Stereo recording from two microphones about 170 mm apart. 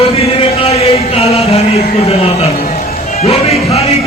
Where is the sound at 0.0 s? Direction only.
35° left (ahead or behind).